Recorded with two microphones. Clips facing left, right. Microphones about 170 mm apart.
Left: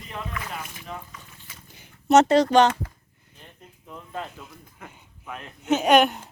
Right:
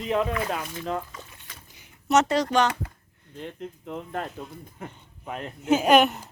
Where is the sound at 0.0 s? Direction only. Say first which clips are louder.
Right 10 dB; 90° right.